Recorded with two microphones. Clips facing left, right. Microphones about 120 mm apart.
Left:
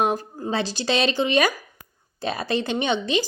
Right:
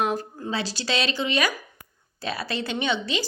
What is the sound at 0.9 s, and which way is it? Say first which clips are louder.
Speech: left 5 dB; 50° left (ahead or behind).